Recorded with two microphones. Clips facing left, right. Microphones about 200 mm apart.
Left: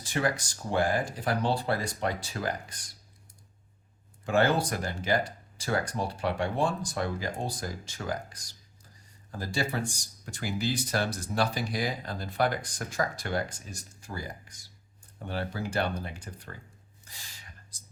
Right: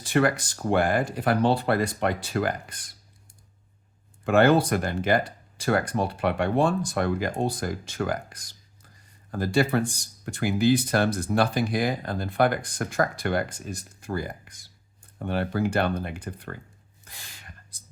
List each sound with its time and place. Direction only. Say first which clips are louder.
0.0 s speech: right 7 dB; 60° right (ahead or behind)
4.3 s speech: right 6 dB; 60° right (ahead or behind)
17.1 s gasp: right 4 dB; 55° right (ahead or behind)